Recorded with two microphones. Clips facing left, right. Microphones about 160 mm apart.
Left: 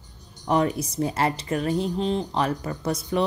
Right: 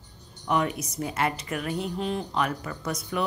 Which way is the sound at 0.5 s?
35° left (ahead or behind).